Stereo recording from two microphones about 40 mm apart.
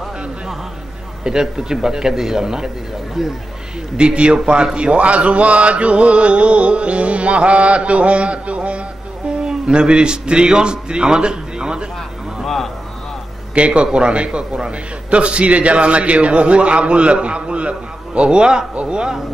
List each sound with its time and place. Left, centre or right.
1.2 s a man's voice: centre
3.9 s a man's voice: right
4.7 s a sound: right
9.4 s speech: right
12.4 s a sound: centre
13.6 s a man's voice: right